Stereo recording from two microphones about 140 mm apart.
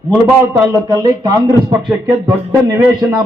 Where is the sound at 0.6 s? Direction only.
25° right (ahead or behind).